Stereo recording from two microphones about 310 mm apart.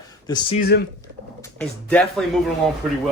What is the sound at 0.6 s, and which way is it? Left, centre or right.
Speech, left.